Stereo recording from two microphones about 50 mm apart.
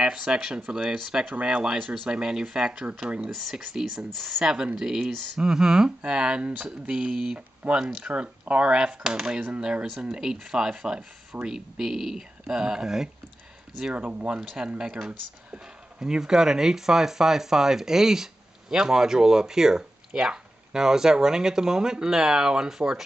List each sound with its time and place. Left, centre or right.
0.0 s speech: centre
13.9 s speech: right; by 23.0 s centre